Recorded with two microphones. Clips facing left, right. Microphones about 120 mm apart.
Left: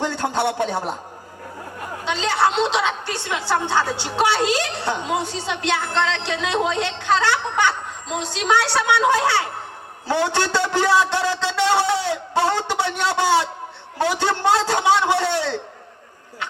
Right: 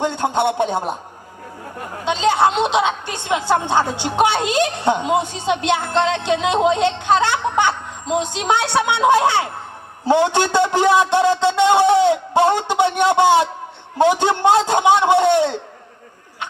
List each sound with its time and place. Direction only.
0.0 s a man's voice: 20° right (ahead or behind)
2.0 s a woman's voice: 20° right (ahead or behind)